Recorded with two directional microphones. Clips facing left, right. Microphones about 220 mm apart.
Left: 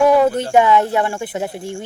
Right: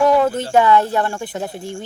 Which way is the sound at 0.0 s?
15° left (ahead or behind).